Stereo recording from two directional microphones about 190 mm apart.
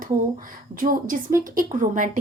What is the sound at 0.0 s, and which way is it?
Speech, 45° right (ahead or behind).